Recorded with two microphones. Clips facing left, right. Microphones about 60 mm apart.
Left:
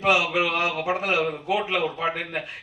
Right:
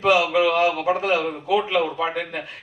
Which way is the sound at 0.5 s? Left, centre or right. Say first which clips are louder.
Right 5 dB; left.